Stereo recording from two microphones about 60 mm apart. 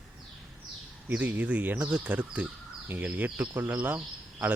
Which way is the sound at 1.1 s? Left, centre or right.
Right.